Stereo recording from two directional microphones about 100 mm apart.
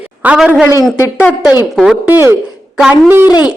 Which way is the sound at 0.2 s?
15° right (ahead or behind).